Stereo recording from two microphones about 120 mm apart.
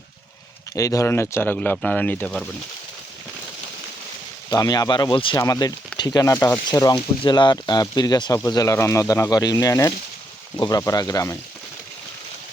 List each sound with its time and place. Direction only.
0.7 s speech: 25° left (ahead or behind)
4.4 s speech: 35° left (ahead or behind)
5.4 s speech: 30° left (ahead or behind)